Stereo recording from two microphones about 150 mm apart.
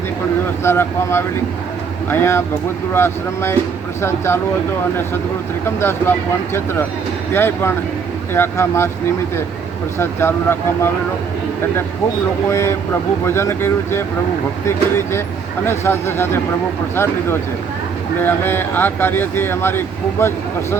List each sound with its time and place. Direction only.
0.6 s speech: 15° left (ahead or behind)
5.6 s speech: 15° left (ahead or behind)
10.0 s speech: 15° left (ahead or behind)
12.5 s speech: 15° left (ahead or behind)
15.6 s speech: 15° left (ahead or behind)